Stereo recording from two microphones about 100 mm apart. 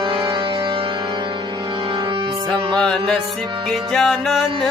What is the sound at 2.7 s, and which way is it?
Music, 10° left (ahead or behind).